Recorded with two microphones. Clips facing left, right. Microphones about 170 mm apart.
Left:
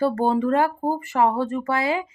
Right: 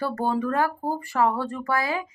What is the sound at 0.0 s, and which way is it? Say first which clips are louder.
Speech: left 5 dB; 25° left (ahead or behind).